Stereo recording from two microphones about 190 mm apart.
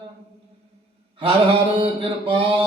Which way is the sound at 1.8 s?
30° right (ahead or behind).